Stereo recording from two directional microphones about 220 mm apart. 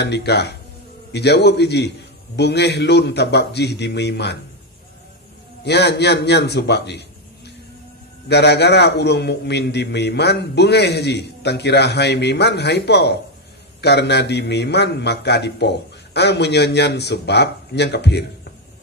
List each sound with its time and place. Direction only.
0.0 s a man's voice: 50° left (ahead or behind)
5.6 s a man's voice: 50° left (ahead or behind)
8.3 s a man's voice: 50° left (ahead or behind)